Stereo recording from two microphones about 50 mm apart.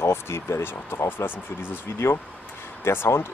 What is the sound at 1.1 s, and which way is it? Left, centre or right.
Speech, left.